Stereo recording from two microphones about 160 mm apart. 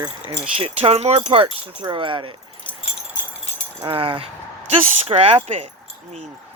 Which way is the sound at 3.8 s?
35° right (ahead or behind).